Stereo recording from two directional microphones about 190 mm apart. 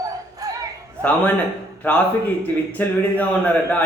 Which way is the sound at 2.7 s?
10° left (ahead or behind).